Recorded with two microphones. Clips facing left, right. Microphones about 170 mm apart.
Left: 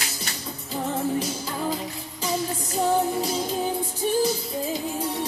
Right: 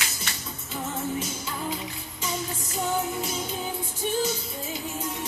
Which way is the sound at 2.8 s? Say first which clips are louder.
Left 6 dB; 35° left (ahead or behind).